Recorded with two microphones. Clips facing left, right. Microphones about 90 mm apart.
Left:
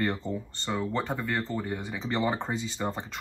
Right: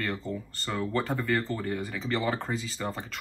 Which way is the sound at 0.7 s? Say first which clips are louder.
Even; 10° left (ahead or behind).